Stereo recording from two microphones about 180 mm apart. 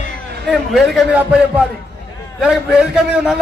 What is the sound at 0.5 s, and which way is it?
A man's voice, centre (ahead or behind).